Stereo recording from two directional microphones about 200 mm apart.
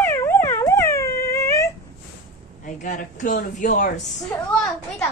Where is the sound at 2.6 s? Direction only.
40° left (ahead or behind).